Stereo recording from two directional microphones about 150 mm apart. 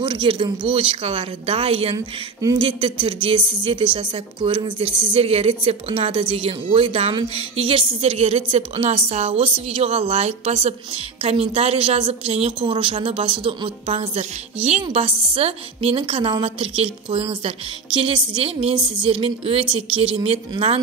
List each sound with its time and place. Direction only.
0.0 s a woman's voice: 35° right (ahead or behind)
2.0 s speech: 25° right (ahead or behind)
2.6 s a woman's voice: 35° right (ahead or behind)